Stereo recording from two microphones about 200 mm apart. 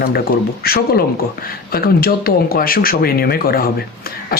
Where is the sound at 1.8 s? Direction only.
50° left (ahead or behind).